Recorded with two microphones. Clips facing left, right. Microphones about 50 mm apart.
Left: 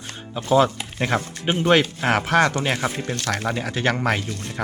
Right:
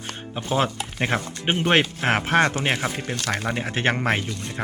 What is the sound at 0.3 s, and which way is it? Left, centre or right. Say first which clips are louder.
Speech: left 6 dB; right.